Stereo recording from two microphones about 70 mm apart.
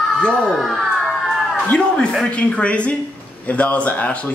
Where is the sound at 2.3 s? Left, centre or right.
Centre.